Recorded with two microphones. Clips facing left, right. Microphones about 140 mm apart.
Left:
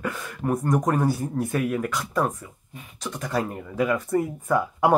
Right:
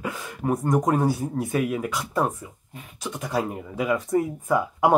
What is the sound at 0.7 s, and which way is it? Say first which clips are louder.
Speech: right 1 dB; 20° right (ahead or behind).